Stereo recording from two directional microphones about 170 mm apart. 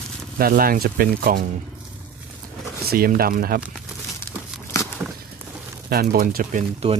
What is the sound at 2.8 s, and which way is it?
Speech, 60° right (ahead or behind).